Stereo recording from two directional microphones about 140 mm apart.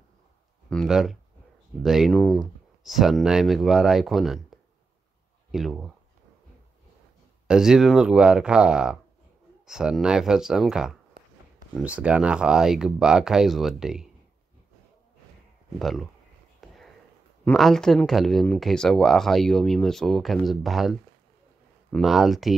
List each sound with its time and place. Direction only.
0.7 s speech: centre (ahead or behind)
7.4 s speech: 5° right (ahead or behind)
15.8 s speech: centre (ahead or behind)
16.6 s a sound: centre (ahead or behind)
17.5 s speech: 5° left (ahead or behind)
21.9 s speech: centre (ahead or behind)